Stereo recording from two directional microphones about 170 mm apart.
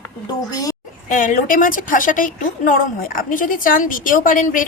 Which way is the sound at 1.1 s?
50° left (ahead or behind).